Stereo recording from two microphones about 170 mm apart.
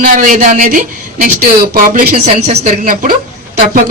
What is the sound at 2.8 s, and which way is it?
Speech, 55° right (ahead or behind).